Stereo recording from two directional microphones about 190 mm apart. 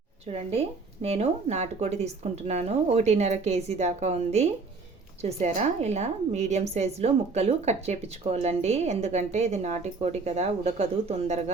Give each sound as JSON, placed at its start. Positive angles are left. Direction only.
{"t": 0.3, "sound": "a woman's voice", "side_deg": -35}